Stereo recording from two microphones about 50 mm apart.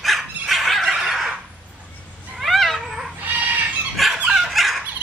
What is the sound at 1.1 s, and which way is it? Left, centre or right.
Fowl, centre.